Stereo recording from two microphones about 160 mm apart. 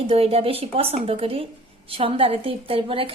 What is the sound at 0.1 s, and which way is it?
A woman's voice, 35° right (ahead or behind).